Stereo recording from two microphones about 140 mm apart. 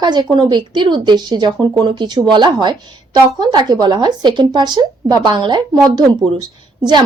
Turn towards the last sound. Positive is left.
turn(degrees=-30)  # may be behind; listen again after turning